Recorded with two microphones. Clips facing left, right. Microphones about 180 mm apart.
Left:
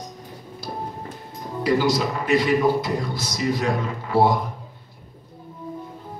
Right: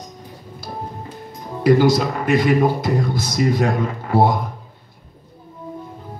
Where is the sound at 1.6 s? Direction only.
50° right (ahead or behind).